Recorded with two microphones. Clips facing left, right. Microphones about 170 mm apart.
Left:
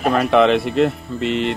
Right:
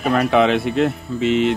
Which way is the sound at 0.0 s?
Centre (ahead or behind).